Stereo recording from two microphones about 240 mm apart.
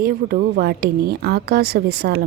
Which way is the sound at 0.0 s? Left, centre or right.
Right.